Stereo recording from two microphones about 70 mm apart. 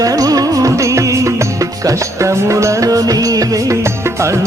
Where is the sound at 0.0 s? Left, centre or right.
Right.